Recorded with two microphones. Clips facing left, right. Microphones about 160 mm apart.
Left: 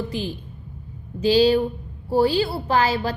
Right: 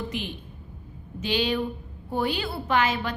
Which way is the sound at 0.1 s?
35° left (ahead or behind).